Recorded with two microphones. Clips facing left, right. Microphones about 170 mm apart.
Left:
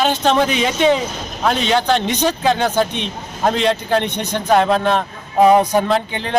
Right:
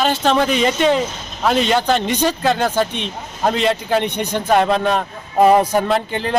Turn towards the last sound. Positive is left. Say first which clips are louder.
# even
turn(degrees=-5)  # may be behind; listen again after turning